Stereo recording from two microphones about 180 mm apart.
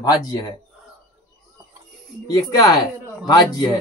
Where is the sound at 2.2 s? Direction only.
20° left (ahead or behind).